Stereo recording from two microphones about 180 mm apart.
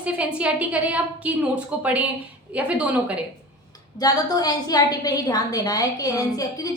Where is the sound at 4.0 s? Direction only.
20° left (ahead or behind).